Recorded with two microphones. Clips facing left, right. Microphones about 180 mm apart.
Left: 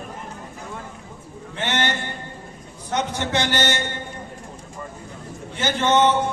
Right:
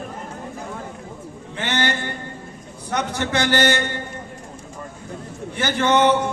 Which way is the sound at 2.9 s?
20° left (ahead or behind).